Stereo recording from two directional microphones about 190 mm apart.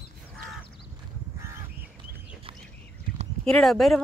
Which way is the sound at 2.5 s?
25° right (ahead or behind).